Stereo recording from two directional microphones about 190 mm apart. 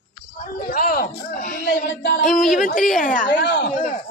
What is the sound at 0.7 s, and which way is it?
Speech, 50° left (ahead or behind).